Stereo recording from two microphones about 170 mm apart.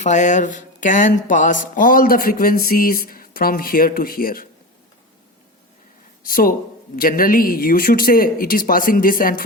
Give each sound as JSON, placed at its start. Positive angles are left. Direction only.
{"t": 0.0, "sound": "speech", "side_deg": 45}
{"t": 6.2, "sound": "speech", "side_deg": 55}